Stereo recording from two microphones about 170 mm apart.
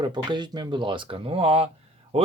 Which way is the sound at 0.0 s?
25° right (ahead or behind).